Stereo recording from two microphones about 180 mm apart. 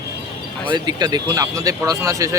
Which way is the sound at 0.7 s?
25° right (ahead or behind).